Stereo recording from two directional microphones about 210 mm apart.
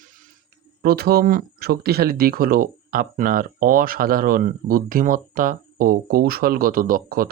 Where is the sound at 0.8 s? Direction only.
50° right (ahead or behind).